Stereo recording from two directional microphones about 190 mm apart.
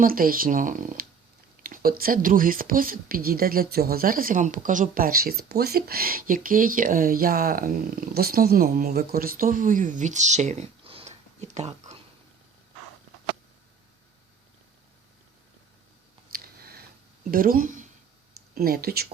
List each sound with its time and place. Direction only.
0.0 s speech: 50° right (ahead or behind)
16.3 s a sound: 55° right (ahead or behind)
17.3 s speech: 50° right (ahead or behind)